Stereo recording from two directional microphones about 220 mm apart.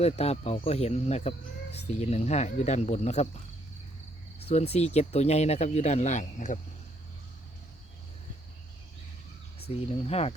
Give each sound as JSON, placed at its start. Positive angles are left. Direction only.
{"t": 0.0, "sound": "speech", "side_deg": 30}
{"t": 9.6, "sound": "speech", "side_deg": 25}